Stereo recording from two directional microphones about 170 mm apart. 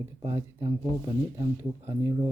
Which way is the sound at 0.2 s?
20° right (ahead or behind).